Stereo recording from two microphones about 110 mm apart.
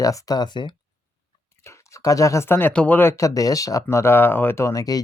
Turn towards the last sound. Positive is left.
turn(degrees=35)  # may be behind; listen again after turning